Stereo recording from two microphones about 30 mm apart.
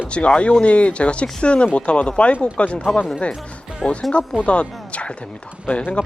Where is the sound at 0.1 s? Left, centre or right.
Left.